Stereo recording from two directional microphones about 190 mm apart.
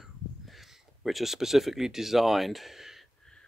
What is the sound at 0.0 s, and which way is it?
Speech, centre (ahead or behind).